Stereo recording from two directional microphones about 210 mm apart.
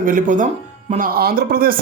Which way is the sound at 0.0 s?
40° right (ahead or behind).